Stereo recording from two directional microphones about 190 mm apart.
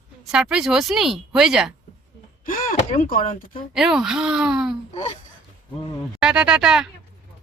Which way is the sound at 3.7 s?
5° right (ahead or behind).